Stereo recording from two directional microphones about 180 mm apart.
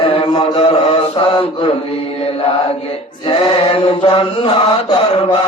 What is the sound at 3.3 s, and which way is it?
Mantra, 30° left (ahead or behind).